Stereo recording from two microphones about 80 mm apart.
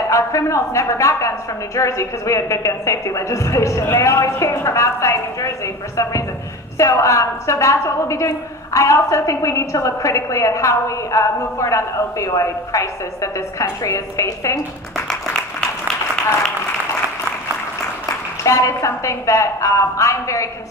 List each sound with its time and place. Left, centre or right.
0.1 s a woman's voice: left
6.8 s a woman's voice: left
18.0 s a woman's voice: left